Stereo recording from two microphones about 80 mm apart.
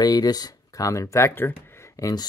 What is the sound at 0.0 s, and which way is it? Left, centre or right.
Speech, left.